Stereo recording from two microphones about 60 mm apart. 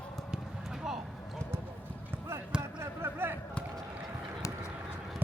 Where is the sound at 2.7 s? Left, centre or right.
Right.